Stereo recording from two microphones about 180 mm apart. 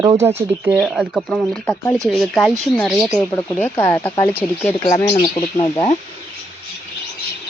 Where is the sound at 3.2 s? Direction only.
10° left (ahead or behind).